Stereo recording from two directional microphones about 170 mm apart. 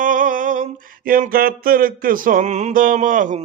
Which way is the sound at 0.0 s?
50° right (ahead or behind).